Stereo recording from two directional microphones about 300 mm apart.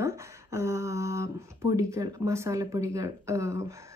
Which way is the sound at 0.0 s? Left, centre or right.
Centre.